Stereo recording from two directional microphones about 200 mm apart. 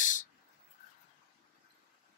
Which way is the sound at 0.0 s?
40° left (ahead or behind).